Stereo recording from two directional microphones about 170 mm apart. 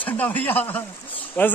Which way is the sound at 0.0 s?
10° left (ahead or behind).